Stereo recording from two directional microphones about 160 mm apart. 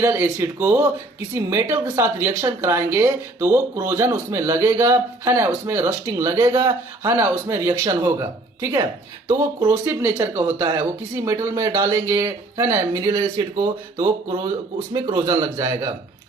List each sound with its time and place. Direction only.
0.0 s speech: 15° right (ahead or behind)
9.6 s speech: 15° right (ahead or behind)